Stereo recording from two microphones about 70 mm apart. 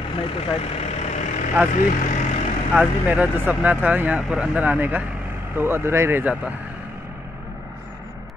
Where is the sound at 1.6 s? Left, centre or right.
Right.